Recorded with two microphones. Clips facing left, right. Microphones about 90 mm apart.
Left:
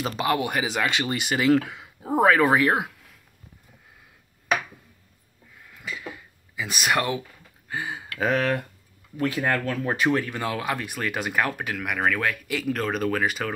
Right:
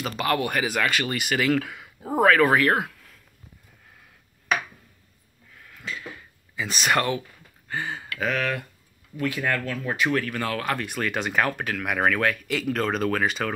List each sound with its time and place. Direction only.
0.3 s speech: 15° left (ahead or behind)
5.7 s a sound: 10° left (ahead or behind)
7.6 s speech: 10° left (ahead or behind)
8.1 s speech: 30° left (ahead or behind); by 13.5 s 5° left (ahead or behind)